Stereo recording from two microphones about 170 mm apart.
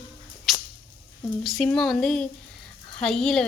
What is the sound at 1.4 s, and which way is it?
A woman's voice, centre (ahead or behind).